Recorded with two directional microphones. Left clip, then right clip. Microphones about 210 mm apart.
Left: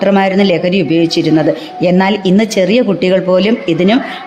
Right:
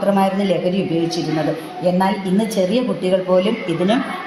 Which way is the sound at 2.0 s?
50° left (ahead or behind).